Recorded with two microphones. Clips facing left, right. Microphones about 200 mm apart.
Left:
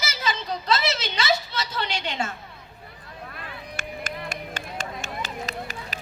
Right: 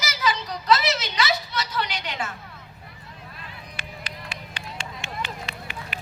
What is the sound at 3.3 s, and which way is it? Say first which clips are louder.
Run: left 5 dB; 50° left (ahead or behind).